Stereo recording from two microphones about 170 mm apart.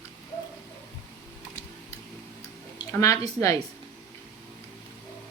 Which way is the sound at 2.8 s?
20° left (ahead or behind).